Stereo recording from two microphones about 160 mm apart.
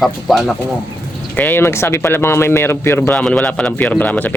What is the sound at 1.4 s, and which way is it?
A man's voice, 10° left (ahead or behind).